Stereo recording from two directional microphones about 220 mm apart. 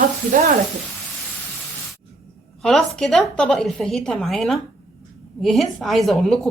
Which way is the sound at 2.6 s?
5° left (ahead or behind).